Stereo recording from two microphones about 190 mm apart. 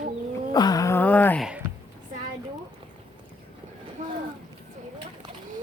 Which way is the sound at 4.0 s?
40° right (ahead or behind).